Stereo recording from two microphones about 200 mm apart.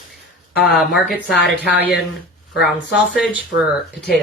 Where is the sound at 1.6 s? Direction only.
55° left (ahead or behind).